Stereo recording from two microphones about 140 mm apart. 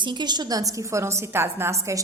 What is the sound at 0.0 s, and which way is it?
A woman's voice, 35° right (ahead or behind).